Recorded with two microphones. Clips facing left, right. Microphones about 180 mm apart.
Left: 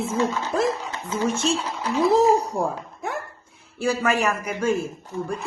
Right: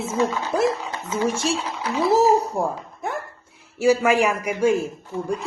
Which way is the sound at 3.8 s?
10° right (ahead or behind).